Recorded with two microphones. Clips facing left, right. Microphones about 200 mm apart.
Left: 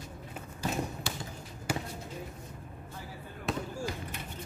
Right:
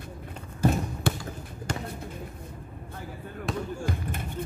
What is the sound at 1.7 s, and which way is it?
Basketball bounce, 5° left (ahead or behind).